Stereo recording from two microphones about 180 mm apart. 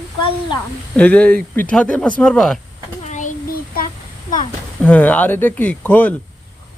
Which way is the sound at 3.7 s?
55° left (ahead or behind).